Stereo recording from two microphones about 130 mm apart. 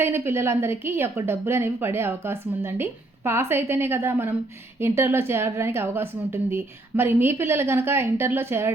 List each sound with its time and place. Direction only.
0.0 s a woman's voice: 20° right (ahead or behind)